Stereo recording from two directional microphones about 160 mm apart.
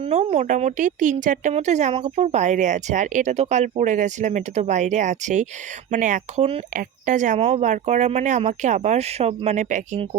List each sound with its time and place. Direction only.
0.0 s speech: 45° right (ahead or behind)